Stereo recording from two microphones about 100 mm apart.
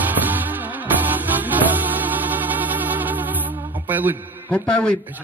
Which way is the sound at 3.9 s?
20° right (ahead or behind).